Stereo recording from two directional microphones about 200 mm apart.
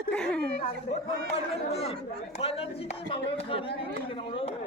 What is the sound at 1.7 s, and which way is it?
Speech, 30° left (ahead or behind).